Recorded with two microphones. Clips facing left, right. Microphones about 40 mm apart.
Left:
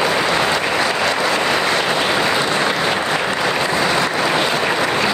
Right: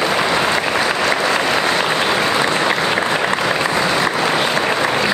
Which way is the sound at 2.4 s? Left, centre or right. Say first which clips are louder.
Right 1 dB; centre.